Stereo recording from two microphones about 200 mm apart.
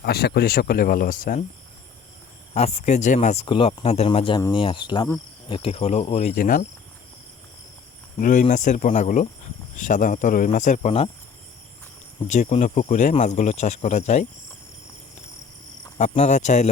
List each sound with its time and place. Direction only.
0.0 s speech: 50° left (ahead or behind)
2.5 s speech: 30° left (ahead or behind)
8.2 s speech: 40° left (ahead or behind)
12.3 s speech: 35° left (ahead or behind)
16.0 s speech: 35° left (ahead or behind)